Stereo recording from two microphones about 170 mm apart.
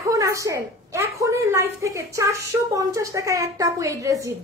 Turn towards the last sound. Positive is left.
turn(degrees=-20)  # may be behind; listen again after turning